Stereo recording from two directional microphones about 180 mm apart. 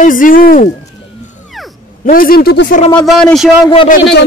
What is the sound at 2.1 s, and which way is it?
Speech, 55° left (ahead or behind).